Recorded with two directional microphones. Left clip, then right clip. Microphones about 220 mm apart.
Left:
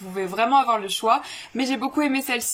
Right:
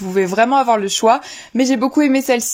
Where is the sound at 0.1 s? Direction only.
35° right (ahead or behind).